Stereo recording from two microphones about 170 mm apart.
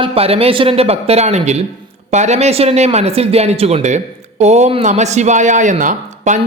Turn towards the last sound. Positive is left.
turn(degrees=-45)  # may be behind; listen again after turning